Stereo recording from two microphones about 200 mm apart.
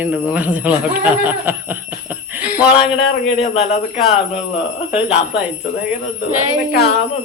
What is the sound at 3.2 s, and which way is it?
Speech, 30° left (ahead or behind).